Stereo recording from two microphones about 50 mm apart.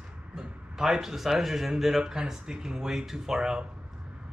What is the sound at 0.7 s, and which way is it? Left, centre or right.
Speech, centre.